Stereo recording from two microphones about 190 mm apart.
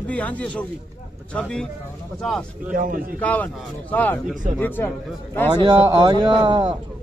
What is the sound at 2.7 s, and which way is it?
Speech, 45° right (ahead or behind).